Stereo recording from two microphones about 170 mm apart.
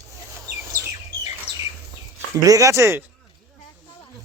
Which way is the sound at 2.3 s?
20° right (ahead or behind).